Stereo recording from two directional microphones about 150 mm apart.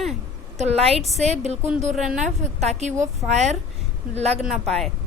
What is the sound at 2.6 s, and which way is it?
Speech, 45° right (ahead or behind).